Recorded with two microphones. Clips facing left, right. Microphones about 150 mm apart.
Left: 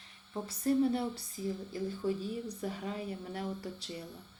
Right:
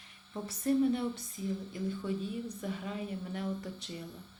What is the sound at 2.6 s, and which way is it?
Speech, 35° left (ahead or behind).